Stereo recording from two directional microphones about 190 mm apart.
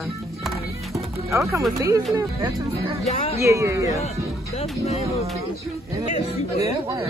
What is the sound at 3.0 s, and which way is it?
Speech, 35° left (ahead or behind).